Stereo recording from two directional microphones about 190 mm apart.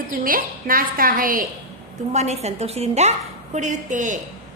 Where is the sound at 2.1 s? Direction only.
35° right (ahead or behind).